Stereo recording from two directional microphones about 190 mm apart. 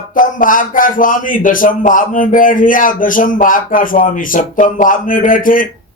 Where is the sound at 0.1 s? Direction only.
45° left (ahead or behind).